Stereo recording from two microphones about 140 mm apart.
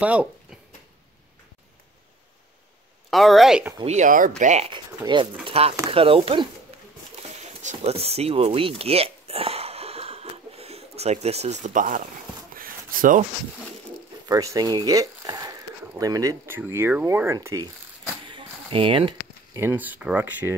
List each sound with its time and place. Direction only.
0.0 s speech: 10° right (ahead or behind)
3.1 s a woman's voice: centre (ahead or behind)
3.8 s speech: 60° right (ahead or behind)
4.6 s speech: 35° right (ahead or behind)
5.4 s speech: 45° right (ahead or behind)
7.4 s speech: 50° right (ahead or behind); by 12.1 s 70° right (ahead or behind)
12.5 s rub: 90° right
14.2 s speech: 25° right (ahead or behind)
18.2 s a sound: 40° right (ahead or behind)
19.5 s speech: 15° right (ahead or behind)